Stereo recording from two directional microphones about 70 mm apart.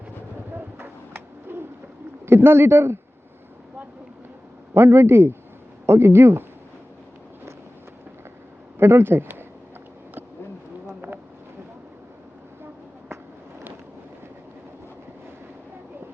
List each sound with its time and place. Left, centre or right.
0.5 s bird: right
2.2 s speech: right
4.7 s speech: right
8.8 s speech: right
10.8 s insect: right